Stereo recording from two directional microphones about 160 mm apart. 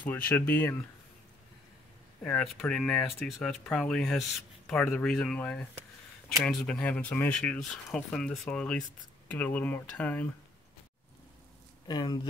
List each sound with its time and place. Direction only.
0.5 s speech: 15° left (ahead or behind)
2.2 s speech: 5° left (ahead or behind)
11.9 s speech: 25° left (ahead or behind)